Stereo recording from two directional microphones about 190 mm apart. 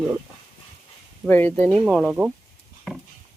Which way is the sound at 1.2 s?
10° left (ahead or behind).